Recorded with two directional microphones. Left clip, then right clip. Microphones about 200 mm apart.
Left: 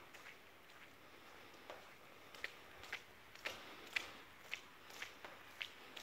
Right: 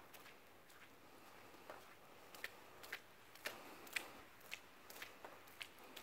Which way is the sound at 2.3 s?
15° right (ahead or behind).